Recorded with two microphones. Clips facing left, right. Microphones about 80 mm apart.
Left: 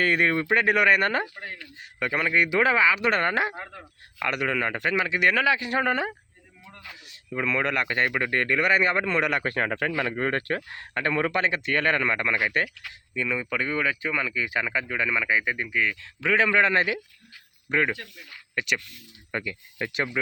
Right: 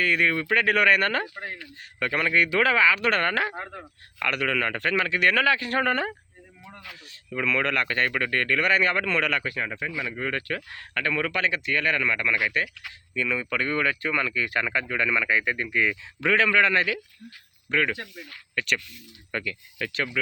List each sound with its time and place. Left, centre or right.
0.0 s a man's voice: left; by 1.3 s centre
1.4 s speech: centre
2.0 s speech: centre
3.6 s speech: centre
4.2 s speech: centre
6.7 s speech: centre
7.3 s speech: centre
9.4 s speech: left
10.7 s a man's voice: left
13.1 s speech: centre
15.8 s speech: centre
16.3 s a man's voice: centre